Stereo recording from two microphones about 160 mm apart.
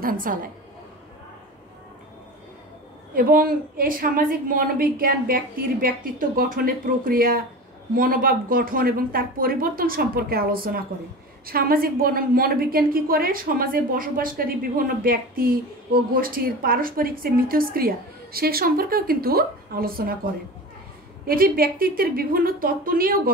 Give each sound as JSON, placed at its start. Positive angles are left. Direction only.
{"t": 0.0, "sound": "a woman's voice", "side_deg": -60}
{"t": 3.2, "sound": "a woman's voice", "side_deg": -60}
{"t": 21.3, "sound": "a woman's voice", "side_deg": -65}